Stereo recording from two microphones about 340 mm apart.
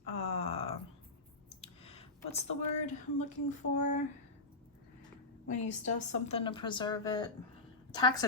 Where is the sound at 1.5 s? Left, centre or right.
Centre.